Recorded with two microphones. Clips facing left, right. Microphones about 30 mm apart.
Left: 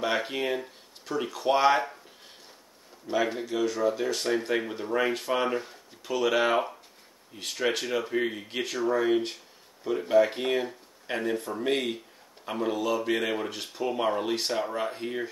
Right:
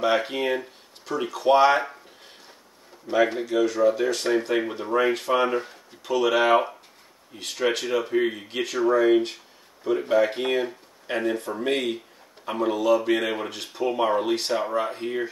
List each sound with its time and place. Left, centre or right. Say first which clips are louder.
0.0 s speech: right 5 dB; centre
3.1 s speech: right 6 dB; centre